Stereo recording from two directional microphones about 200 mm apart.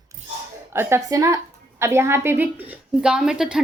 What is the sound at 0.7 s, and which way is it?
A woman's voice, 15° right (ahead or behind).